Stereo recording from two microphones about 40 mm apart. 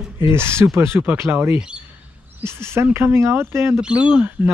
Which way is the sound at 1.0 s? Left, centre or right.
Right.